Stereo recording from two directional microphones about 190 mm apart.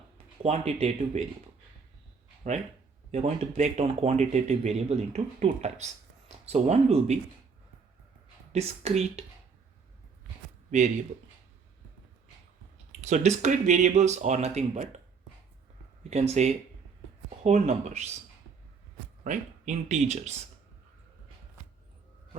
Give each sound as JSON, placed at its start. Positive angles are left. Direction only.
{"t": 0.4, "sound": "speech", "side_deg": -35}
{"t": 2.4, "sound": "speech", "side_deg": -40}
{"t": 8.5, "sound": "speech", "side_deg": -35}
{"t": 13.1, "sound": "speech", "side_deg": -40}
{"t": 16.0, "sound": "speech", "side_deg": -35}
{"t": 19.2, "sound": "speech", "side_deg": -40}